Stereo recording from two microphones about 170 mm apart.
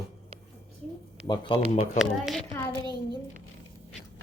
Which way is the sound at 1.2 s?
25° left (ahead or behind).